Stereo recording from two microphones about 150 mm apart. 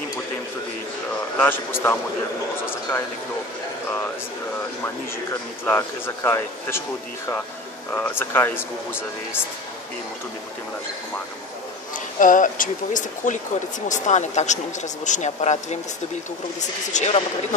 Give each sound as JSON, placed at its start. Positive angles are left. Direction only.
{"t": 1.4, "sound": "speech", "side_deg": 15}
{"t": 5.7, "sound": "speech", "side_deg": 15}
{"t": 7.9, "sound": "speech", "side_deg": 15}
{"t": 12.2, "sound": "speech", "side_deg": 60}
{"t": 16.9, "sound": "speech", "side_deg": 50}